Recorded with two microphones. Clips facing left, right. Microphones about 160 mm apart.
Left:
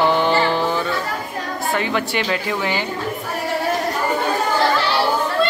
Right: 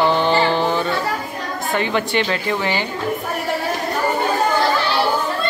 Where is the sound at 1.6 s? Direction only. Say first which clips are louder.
Right 1 dB; centre (ahead or behind).